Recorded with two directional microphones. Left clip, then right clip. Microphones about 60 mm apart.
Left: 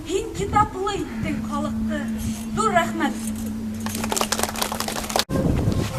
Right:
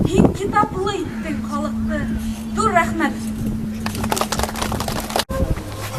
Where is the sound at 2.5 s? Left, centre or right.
Centre.